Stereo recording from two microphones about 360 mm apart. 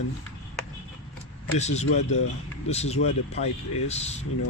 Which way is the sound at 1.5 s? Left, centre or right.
Centre.